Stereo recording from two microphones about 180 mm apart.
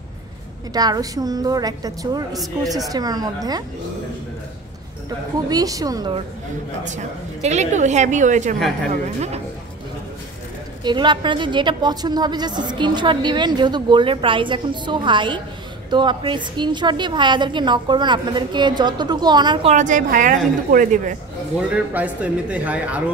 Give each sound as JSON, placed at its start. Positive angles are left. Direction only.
{"t": 0.7, "sound": "a woman's voice", "side_deg": -20}
{"t": 5.5, "sound": "a woman's voice", "side_deg": -20}
{"t": 7.4, "sound": "a woman's voice", "side_deg": -40}
{"t": 10.8, "sound": "a woman's voice", "side_deg": -25}
{"t": 19.7, "sound": "a woman's voice", "side_deg": -45}
{"t": 21.5, "sound": "speech", "side_deg": -10}